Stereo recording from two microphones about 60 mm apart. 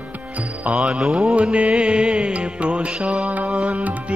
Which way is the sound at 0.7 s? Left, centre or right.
Centre.